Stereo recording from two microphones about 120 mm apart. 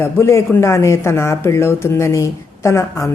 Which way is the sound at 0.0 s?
20° left (ahead or behind).